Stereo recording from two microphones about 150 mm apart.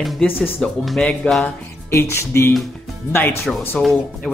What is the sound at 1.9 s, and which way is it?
Music, 20° left (ahead or behind).